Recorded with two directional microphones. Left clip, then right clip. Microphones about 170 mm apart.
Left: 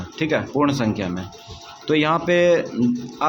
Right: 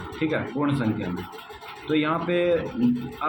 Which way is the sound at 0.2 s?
60° left (ahead or behind).